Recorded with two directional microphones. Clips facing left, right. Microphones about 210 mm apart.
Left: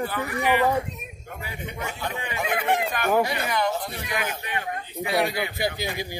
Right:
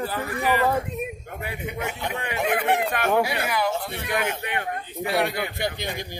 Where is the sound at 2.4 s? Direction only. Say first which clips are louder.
Right 2 dB; 65° right (ahead or behind).